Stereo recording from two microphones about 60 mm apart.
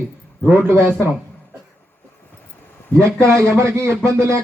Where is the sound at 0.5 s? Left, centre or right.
Right.